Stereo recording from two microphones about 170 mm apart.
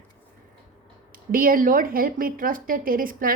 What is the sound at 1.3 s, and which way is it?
A woman's voice, 55° right (ahead or behind).